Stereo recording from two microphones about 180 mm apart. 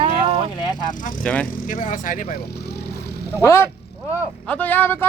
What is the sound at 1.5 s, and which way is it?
Speech, 50° left (ahead or behind).